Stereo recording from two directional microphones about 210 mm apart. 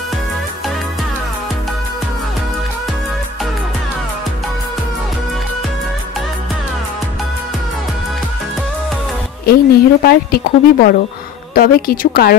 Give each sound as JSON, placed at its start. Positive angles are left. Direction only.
{"t": 9.5, "sound": "a woman's voice", "side_deg": 50}